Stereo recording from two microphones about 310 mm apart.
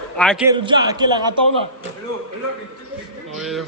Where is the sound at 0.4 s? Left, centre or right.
Centre.